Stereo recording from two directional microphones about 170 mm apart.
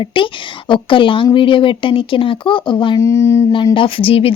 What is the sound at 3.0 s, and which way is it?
Speech, 15° left (ahead or behind).